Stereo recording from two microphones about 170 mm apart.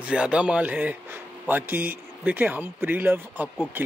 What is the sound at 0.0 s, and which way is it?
A man's voice, 5° right (ahead or behind).